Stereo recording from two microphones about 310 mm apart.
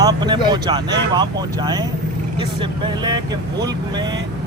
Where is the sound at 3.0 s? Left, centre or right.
Centre.